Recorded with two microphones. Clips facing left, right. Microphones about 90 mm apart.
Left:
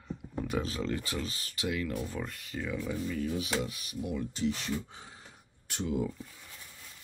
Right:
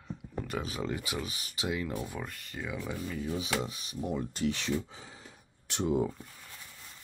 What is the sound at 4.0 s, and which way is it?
Speech, 40° right (ahead or behind).